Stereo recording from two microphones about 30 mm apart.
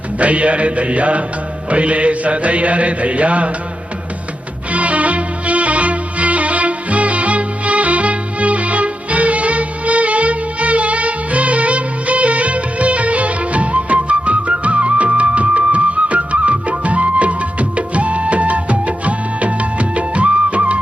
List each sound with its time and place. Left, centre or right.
0.2 s mantra: right
4.7 s music: right